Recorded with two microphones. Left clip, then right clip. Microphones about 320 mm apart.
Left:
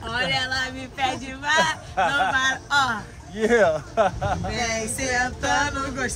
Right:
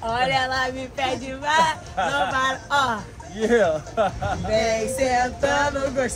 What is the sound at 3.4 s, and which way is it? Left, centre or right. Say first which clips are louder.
Speech: left 1 dB; centre.